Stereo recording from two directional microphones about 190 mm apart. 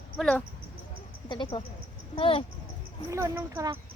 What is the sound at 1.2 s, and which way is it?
Speech, 25° left (ahead or behind).